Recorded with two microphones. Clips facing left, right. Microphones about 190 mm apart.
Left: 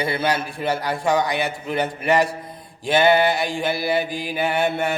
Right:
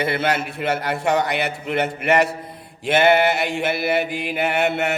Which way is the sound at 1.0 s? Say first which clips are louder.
Even; 65° right (ahead or behind).